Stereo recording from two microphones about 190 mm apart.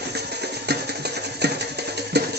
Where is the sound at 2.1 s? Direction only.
60° right (ahead or behind).